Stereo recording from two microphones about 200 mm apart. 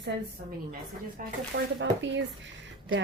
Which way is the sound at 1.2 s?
45° right (ahead or behind).